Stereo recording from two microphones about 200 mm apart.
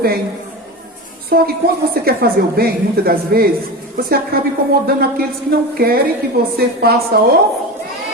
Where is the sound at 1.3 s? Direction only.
50° right (ahead or behind).